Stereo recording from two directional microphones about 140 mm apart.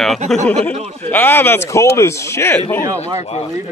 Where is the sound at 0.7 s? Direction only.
50° right (ahead or behind).